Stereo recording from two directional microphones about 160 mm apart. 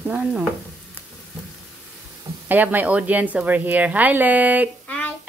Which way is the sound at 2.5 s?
10° right (ahead or behind).